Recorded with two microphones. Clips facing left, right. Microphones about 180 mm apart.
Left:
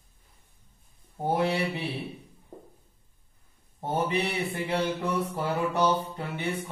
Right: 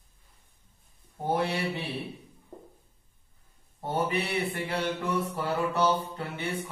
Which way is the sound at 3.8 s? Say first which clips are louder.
Left 1 dB; 20° left (ahead or behind).